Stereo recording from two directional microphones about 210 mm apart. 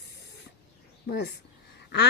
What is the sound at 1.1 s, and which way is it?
Speech, 50° left (ahead or behind).